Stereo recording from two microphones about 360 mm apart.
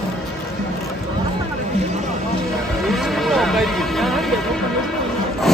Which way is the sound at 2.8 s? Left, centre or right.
Centre.